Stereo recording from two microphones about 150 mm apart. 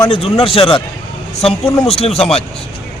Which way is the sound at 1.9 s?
40° left (ahead or behind).